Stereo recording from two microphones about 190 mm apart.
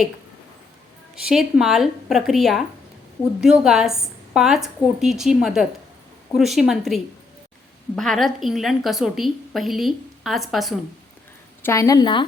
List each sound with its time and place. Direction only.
1.1 s a woman's voice: 5° right (ahead or behind)
11.6 s a woman's voice: 15° left (ahead or behind)